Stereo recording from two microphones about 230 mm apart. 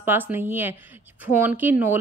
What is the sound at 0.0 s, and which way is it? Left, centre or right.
A woman's voice, centre.